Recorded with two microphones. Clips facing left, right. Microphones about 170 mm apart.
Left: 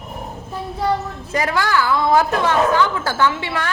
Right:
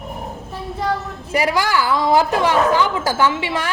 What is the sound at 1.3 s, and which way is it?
A woman's voice, 15° right (ahead or behind).